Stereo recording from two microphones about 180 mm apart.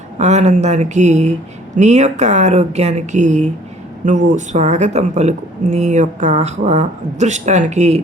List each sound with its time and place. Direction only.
0.2 s speech: 40° right (ahead or behind)